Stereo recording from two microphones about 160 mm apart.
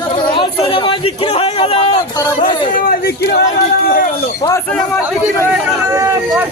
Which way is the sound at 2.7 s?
60° left (ahead or behind).